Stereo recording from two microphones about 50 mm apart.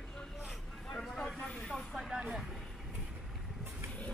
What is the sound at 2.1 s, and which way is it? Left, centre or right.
Vehicle, centre.